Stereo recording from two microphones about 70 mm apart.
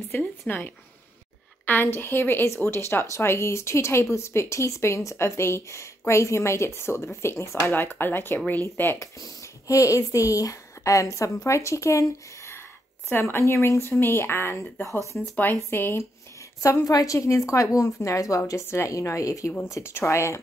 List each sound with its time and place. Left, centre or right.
0.2 s a woman's voice: left
1.7 s a woman's voice: left
7.7 s a woman's voice: left
9.0 s speech: left
13.1 s a woman's voice: left
15.1 s a woman's voice: left
16.6 s a woman's voice: left
18.9 s speech: left
19.6 s a woman's voice: left